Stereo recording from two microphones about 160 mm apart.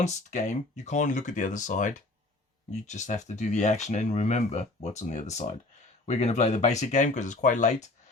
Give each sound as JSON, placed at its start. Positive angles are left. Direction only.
{"t": 0.0, "sound": "speech", "side_deg": 45}